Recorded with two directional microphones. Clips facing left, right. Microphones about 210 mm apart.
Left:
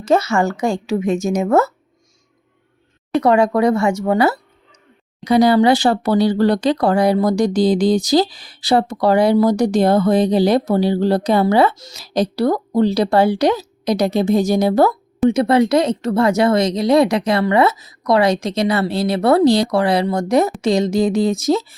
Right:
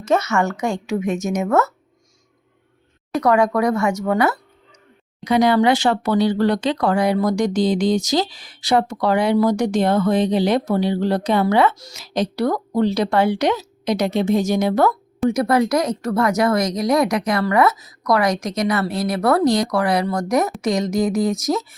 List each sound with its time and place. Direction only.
0.0 s speech: 30° left (ahead or behind)
3.2 s speech: 25° left (ahead or behind)